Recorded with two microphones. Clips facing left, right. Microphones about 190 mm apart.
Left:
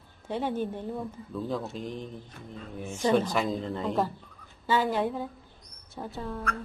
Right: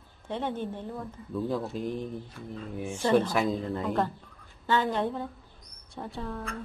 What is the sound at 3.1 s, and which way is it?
Speech, 5° right (ahead or behind).